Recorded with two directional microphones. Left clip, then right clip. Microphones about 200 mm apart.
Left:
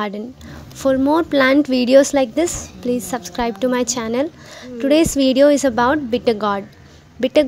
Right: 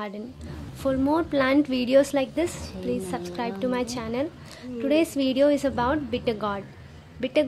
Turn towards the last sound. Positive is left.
turn(degrees=30)  # may be behind; listen again after turning